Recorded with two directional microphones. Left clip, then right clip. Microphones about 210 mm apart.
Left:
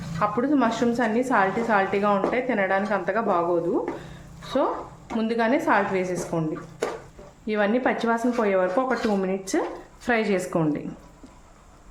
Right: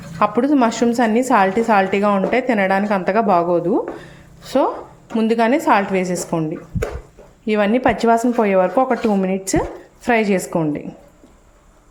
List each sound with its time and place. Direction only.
0.2 s a woman's voice: 40° right (ahead or behind)
7.4 s a woman's voice: 40° right (ahead or behind)
10.5 s a woman's voice: 20° right (ahead or behind)